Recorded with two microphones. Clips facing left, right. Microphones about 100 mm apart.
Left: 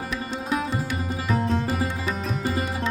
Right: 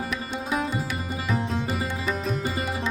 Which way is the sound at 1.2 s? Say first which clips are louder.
Left 3 dB; centre (ahead or behind).